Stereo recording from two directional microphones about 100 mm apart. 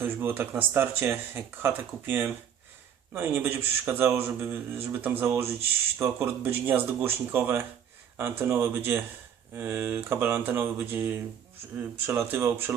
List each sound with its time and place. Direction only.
0.0 s a man's voice: 20° right (ahead or behind)